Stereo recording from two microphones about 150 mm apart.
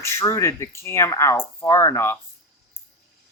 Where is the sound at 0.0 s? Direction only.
20° left (ahead or behind).